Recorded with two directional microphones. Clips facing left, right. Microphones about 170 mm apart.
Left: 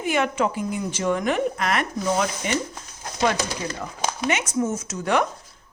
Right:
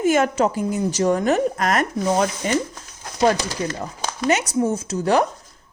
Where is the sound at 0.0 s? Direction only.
45° right (ahead or behind).